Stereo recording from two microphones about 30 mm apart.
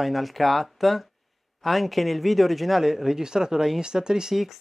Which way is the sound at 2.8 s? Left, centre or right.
Centre.